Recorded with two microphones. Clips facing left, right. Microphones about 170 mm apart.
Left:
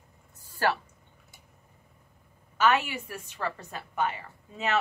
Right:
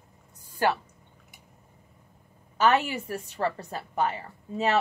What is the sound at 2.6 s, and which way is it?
A woman's voice, 35° right (ahead or behind).